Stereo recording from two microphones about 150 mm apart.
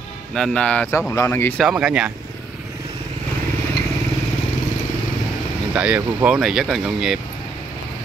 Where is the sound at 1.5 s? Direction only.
5° right (ahead or behind).